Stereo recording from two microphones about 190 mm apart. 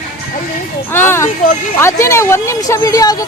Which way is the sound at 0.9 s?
10° left (ahead or behind).